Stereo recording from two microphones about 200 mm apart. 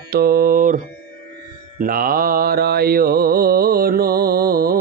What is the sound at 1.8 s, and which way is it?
Mantra, 45° right (ahead or behind).